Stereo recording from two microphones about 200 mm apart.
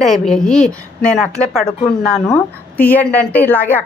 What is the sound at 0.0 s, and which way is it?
Speech, centre (ahead or behind).